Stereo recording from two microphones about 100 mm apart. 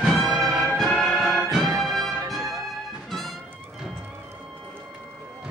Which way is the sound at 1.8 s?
Centre (ahead or behind).